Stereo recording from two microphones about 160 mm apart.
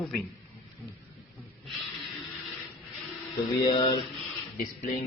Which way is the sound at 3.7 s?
30° left (ahead or behind).